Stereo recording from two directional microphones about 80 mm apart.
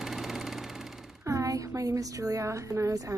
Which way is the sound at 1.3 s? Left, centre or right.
Right.